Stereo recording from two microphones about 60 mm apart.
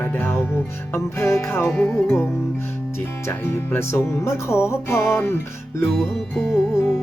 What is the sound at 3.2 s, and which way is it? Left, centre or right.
Music, left.